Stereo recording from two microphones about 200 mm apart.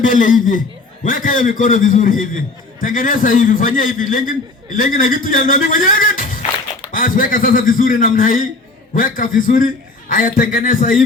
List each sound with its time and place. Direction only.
0.0 s a man's voice: 40° left (ahead or behind)